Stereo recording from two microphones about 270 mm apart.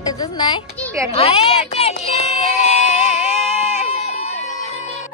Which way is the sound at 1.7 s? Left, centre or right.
Left.